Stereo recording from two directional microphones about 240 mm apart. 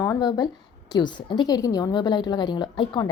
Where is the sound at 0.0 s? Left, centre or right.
Centre.